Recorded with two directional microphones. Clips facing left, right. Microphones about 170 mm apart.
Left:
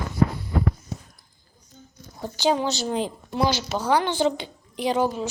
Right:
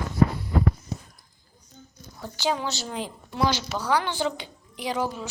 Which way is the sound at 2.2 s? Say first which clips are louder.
Left 5 dB; 30° left (ahead or behind).